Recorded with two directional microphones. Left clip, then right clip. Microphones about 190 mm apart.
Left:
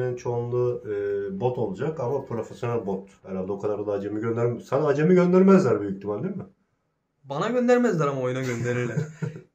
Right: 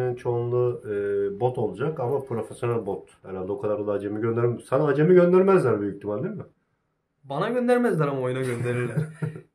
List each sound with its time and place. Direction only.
0.0 s speech: 50° right (ahead or behind)
7.2 s a man's voice: 10° right (ahead or behind)